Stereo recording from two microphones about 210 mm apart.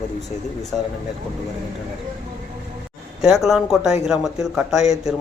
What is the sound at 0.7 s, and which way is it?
Speech, centre (ahead or behind).